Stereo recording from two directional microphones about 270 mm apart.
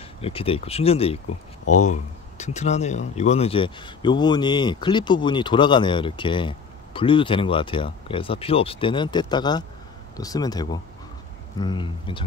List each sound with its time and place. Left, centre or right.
0.2 s speech: left